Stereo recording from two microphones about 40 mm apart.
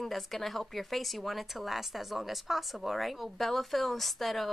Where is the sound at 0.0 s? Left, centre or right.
Centre.